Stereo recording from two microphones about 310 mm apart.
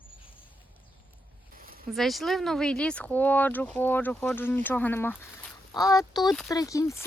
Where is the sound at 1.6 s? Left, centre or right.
Right.